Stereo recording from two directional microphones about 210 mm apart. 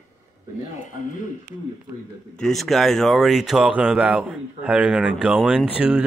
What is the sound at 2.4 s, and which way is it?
Speech, centre (ahead or behind).